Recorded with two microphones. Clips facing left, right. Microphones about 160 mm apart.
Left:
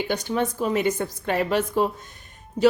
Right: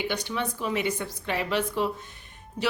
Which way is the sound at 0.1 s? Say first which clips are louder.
Left 6 dB; 45° left (ahead or behind).